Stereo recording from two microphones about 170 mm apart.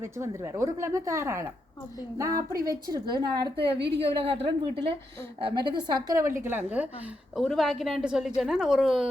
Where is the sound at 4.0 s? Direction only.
35° right (ahead or behind).